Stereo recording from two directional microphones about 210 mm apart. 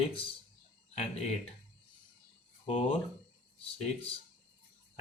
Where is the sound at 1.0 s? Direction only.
30° left (ahead or behind).